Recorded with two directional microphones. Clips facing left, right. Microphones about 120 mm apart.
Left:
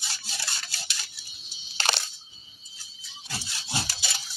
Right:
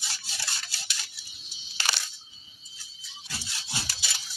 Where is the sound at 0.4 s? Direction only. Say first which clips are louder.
Even; 50° left (ahead or behind).